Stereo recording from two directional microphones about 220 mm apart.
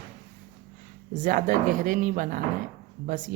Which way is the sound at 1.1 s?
35° right (ahead or behind).